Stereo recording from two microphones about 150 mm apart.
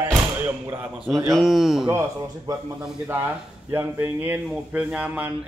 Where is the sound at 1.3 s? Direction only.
Centre (ahead or behind).